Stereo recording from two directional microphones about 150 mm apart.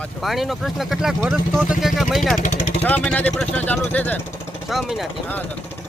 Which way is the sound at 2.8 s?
10° left (ahead or behind).